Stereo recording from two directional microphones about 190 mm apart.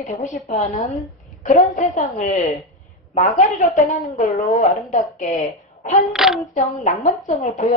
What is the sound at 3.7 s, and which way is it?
A woman's voice, 35° left (ahead or behind).